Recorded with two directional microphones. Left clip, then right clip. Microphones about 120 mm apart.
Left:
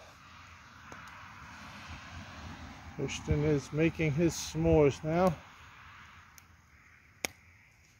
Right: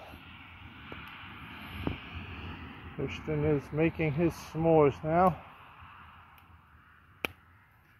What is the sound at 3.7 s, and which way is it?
Speech, 50° left (ahead or behind).